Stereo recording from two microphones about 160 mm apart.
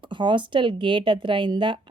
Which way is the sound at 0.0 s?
30° right (ahead or behind).